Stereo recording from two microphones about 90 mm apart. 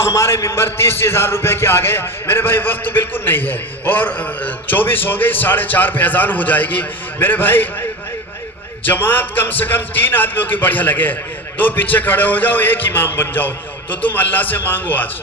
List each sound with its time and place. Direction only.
0.1 s a man's voice: 30° left (ahead or behind)
8.9 s a man's voice: 25° left (ahead or behind)